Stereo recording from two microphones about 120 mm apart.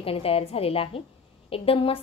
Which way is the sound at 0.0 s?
55° left (ahead or behind).